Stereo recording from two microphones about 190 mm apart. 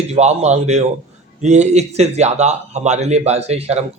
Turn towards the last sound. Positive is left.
turn(degrees=-35)  # may be behind; listen again after turning